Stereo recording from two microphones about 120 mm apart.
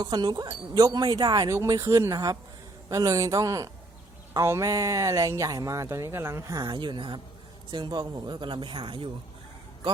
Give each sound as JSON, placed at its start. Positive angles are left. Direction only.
{"t": 0.0, "sound": "speech", "side_deg": -35}
{"t": 1.5, "sound": "speech", "side_deg": -25}
{"t": 6.6, "sound": "speech", "side_deg": -40}